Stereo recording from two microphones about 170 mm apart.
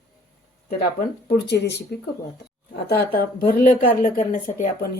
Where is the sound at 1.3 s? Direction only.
80° left.